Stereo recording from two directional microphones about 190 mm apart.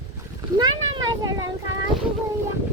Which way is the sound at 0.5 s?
20° right (ahead or behind).